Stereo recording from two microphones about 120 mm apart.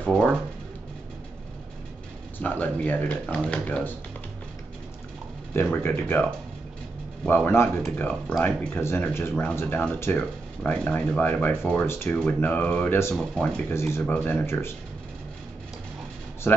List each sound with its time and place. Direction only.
0.0 s speech: 10° left (ahead or behind)
2.3 s speech: 15° left (ahead or behind)
5.5 s speech: 20° left (ahead or behind)
7.2 s speech: 15° left (ahead or behind)
16.5 s speech: 15° left (ahead or behind)